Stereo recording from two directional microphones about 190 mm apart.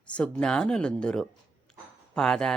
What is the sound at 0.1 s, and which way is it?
Speech, 5° left (ahead or behind).